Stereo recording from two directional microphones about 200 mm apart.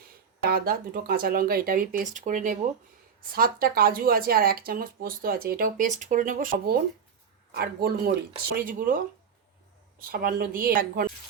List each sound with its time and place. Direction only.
0.4 s speech: 50° right (ahead or behind)
10.0 s speech: 45° right (ahead or behind)